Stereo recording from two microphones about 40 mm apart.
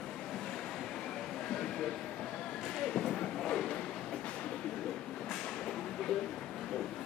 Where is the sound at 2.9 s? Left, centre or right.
Centre.